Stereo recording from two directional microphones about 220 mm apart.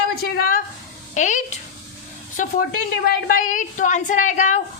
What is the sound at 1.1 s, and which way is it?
A woman's voice, 35° left (ahead or behind).